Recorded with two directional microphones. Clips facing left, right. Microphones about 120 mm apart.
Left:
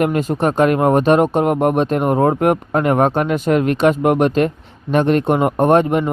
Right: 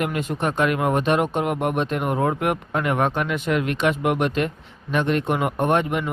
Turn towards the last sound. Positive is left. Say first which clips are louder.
# left 7 dB
turn(degrees=40)  # may be behind; listen again after turning